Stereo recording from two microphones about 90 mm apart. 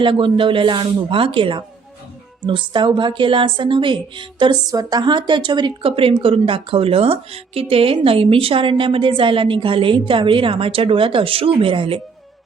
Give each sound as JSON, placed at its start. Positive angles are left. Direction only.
{"t": 0.0, "sound": "a woman's voice", "side_deg": -70}
{"t": 5.8, "sound": "speech", "side_deg": -90}